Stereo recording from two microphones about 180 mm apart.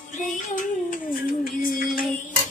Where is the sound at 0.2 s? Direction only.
45° left (ahead or behind).